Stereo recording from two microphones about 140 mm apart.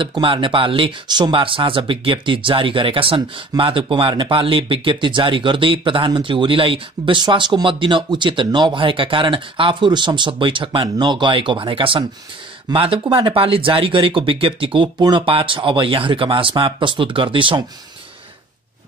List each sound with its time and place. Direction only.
0.0 s speech: 35° right (ahead or behind)